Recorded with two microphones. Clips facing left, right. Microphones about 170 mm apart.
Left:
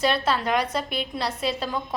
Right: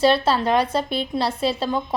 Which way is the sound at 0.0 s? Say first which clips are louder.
Right 5 dB; 30° right (ahead or behind).